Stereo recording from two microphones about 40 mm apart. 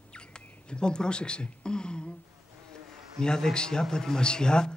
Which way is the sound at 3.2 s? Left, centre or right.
Centre.